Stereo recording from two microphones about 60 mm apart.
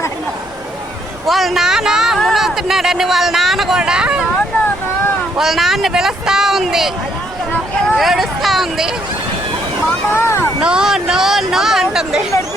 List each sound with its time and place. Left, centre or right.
1.3 s speech: centre
3.8 s speech: centre
5.4 s speech: centre
7.9 s speech: centre
10.1 s speech: left
10.6 s speech: centre